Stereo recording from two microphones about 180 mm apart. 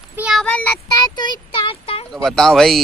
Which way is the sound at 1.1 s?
25° left (ahead or behind).